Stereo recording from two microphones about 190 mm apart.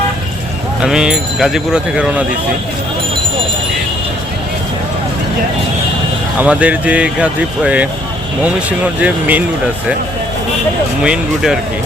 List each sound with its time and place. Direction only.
0.8 s speech: 5° right (ahead or behind)
6.4 s speech: 5° right (ahead or behind)
11.0 s speech: 5° right (ahead or behind)